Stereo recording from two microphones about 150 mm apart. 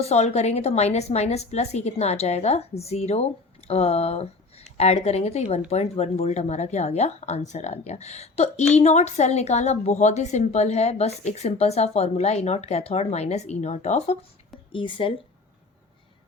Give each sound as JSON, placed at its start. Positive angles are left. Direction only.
{"t": 0.0, "sound": "speech", "side_deg": 45}
{"t": 14.7, "sound": "speech", "side_deg": 35}